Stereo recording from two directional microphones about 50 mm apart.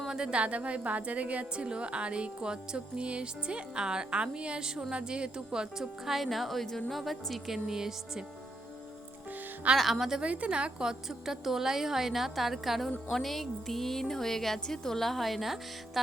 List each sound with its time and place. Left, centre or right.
0.1 s a woman's voice: centre
9.7 s speech: centre
10.2 s a woman's voice: right
11.1 s speech: centre